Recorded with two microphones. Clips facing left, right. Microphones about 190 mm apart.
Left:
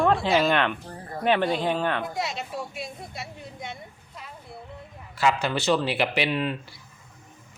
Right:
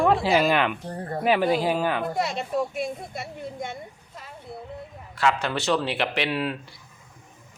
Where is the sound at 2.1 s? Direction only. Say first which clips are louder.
Right 5 dB; 55° right (ahead or behind).